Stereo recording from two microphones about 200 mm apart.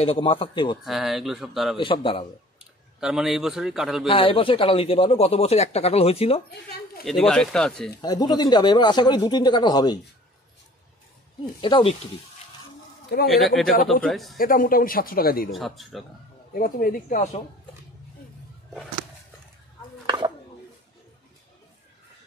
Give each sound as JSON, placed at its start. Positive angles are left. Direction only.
{"t": 0.0, "sound": "speech", "side_deg": 30}
{"t": 0.8, "sound": "a man's voice", "side_deg": 0}
{"t": 1.8, "sound": "speech", "side_deg": 25}
{"t": 3.0, "sound": "a man's voice", "side_deg": -5}
{"t": 4.1, "sound": "speech", "side_deg": 25}
{"t": 7.1, "sound": "a man's voice", "side_deg": 0}
{"t": 8.0, "sound": "speech", "side_deg": 20}
{"t": 11.6, "sound": "speech", "side_deg": 25}
{"t": 13.4, "sound": "a man's voice", "side_deg": 0}
{"t": 14.4, "sound": "speech", "side_deg": 45}
{"t": 15.5, "sound": "a man's voice", "side_deg": 0}
{"t": 16.5, "sound": "speech", "side_deg": 45}
{"t": 20.1, "sound": "chopping", "side_deg": -20}